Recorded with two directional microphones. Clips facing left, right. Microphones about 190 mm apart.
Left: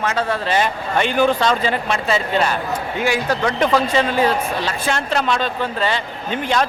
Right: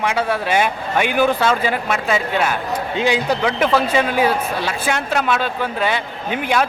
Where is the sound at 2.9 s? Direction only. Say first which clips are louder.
Right 2 dB; 20° right (ahead or behind).